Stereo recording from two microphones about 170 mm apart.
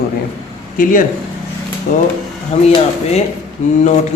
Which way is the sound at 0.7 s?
50° left (ahead or behind).